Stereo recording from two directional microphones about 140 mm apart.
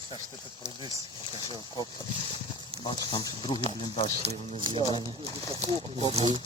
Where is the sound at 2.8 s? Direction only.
35° left (ahead or behind).